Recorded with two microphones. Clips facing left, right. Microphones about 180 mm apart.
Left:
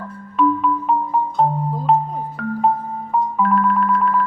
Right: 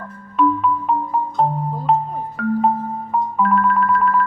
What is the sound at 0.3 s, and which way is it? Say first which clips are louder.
Music: even; centre (ahead or behind).